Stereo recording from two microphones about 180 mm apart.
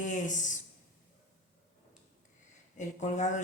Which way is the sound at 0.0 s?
45° left (ahead or behind).